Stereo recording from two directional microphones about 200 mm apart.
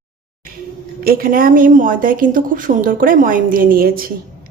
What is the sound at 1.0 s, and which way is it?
A woman's voice, 45° right (ahead or behind).